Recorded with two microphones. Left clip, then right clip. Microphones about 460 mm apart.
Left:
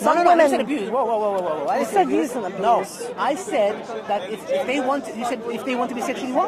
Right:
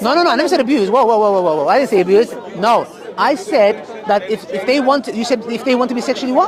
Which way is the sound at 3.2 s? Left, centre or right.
Right.